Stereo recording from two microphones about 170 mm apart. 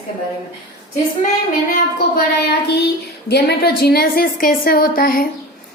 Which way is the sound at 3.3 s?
70° left (ahead or behind).